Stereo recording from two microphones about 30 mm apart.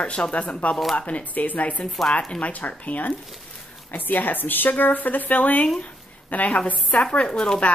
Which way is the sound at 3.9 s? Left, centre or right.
Left.